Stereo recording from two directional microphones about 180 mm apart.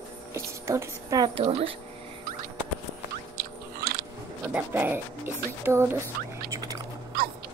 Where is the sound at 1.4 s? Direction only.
35° right (ahead or behind).